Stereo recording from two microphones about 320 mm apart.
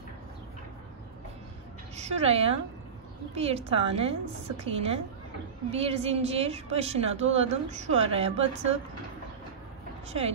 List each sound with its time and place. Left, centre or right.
2.0 s a woman's voice: right
10.0 s speech: centre